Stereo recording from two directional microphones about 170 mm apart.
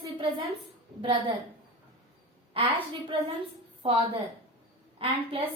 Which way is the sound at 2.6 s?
35° right (ahead or behind).